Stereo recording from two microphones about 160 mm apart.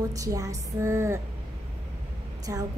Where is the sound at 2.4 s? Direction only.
20° right (ahead or behind).